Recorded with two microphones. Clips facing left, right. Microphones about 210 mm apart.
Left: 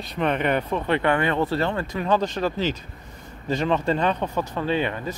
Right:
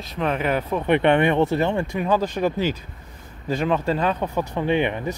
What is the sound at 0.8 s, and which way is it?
Speech, 20° right (ahead or behind).